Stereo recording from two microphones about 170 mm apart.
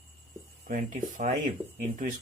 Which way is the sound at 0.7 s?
50° right (ahead or behind).